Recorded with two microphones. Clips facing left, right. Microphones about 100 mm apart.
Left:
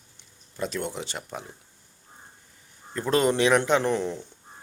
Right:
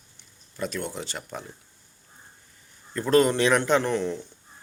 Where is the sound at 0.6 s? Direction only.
20° left (ahead or behind).